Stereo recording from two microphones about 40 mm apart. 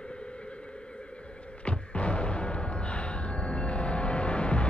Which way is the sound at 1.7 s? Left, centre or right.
Left.